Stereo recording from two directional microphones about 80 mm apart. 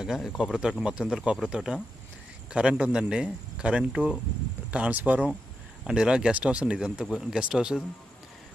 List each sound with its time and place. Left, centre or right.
0.0 s speech: centre